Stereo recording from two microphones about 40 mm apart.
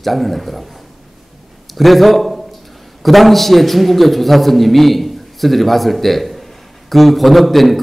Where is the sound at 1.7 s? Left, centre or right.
Centre.